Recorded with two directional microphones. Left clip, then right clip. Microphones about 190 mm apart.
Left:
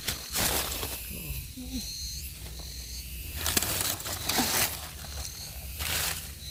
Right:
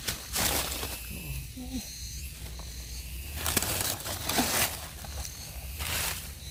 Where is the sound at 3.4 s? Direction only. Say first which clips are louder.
Left 1 dB; 45° right (ahead or behind).